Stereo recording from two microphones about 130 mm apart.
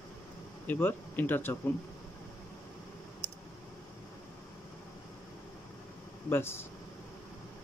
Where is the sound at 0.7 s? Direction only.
15° left (ahead or behind).